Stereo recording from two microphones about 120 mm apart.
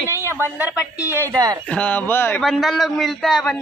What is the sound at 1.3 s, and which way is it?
Speech, 30° right (ahead or behind).